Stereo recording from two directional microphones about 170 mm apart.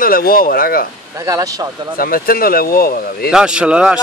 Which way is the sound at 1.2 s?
20° right (ahead or behind).